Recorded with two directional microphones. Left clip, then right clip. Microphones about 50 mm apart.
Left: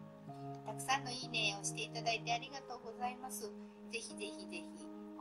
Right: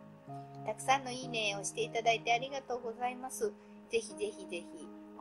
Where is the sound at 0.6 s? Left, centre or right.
Right.